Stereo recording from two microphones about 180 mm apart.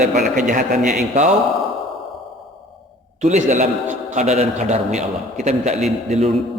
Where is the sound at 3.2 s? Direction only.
40° right (ahead or behind).